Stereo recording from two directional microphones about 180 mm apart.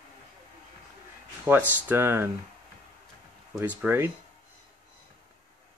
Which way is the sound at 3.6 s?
10° right (ahead or behind).